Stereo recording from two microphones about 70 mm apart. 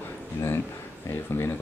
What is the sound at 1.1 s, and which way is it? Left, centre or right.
Speech, left.